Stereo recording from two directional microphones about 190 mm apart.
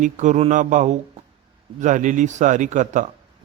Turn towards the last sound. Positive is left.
turn(degrees=-40)  # may be behind; listen again after turning